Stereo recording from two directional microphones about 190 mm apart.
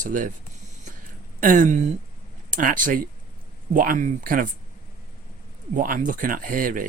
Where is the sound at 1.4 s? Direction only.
45° right (ahead or behind).